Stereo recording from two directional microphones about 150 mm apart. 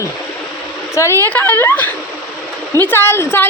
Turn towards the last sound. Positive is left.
turn(degrees=15)  # may be behind; listen again after turning